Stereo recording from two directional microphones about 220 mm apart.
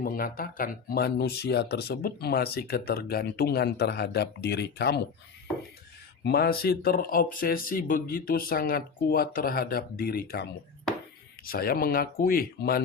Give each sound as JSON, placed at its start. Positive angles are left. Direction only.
{"t": 0.0, "sound": "speech", "side_deg": 40}
{"t": 6.2, "sound": "speech", "side_deg": 45}
{"t": 11.4, "sound": "speech", "side_deg": 40}